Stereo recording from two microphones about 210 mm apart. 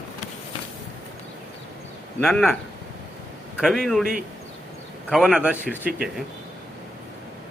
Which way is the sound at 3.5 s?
Centre (ahead or behind).